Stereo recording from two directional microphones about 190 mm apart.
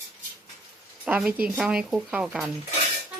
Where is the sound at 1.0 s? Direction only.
5° right (ahead or behind).